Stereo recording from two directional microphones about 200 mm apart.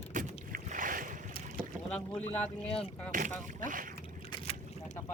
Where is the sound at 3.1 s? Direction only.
40° right (ahead or behind).